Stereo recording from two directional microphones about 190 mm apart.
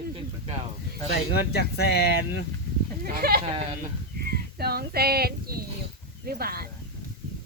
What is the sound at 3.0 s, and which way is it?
Speech, 50° right (ahead or behind).